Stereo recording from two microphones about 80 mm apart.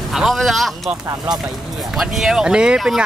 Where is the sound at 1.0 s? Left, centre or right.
Right.